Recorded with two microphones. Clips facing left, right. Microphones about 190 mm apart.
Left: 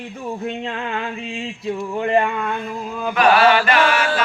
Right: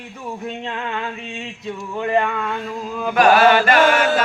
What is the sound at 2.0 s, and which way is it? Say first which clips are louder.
Speech: even; 20° left (ahead or behind).